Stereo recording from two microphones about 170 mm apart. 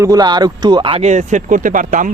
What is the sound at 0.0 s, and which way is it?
Speech, 25° right (ahead or behind).